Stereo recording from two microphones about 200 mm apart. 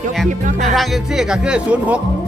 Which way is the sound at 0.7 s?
Centre (ahead or behind).